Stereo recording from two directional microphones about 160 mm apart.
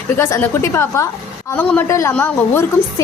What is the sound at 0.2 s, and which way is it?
A woman's voice, 15° left (ahead or behind).